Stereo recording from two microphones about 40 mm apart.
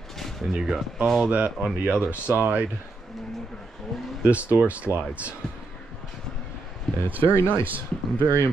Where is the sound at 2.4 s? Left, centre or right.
Right.